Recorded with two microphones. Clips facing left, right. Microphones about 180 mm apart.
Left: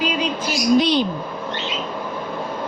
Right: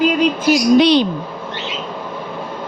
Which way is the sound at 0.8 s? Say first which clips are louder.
Right 5 dB; 80° right.